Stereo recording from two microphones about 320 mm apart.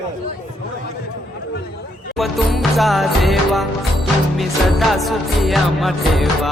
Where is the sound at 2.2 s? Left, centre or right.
Centre.